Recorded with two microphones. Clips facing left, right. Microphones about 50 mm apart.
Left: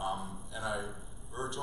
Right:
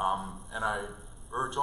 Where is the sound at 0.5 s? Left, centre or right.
Right.